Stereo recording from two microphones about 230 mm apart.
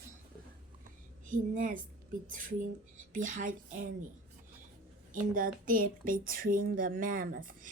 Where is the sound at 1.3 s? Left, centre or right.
Right.